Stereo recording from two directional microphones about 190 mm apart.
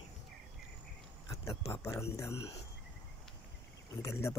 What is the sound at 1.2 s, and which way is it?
Speech, 15° left (ahead or behind).